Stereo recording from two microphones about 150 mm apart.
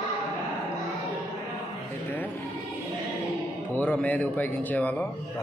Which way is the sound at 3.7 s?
10° left (ahead or behind).